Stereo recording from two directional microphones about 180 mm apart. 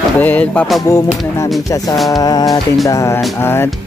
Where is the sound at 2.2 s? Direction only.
20° left (ahead or behind).